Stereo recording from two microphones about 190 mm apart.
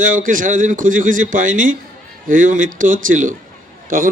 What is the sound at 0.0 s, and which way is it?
Speech, 45° right (ahead or behind).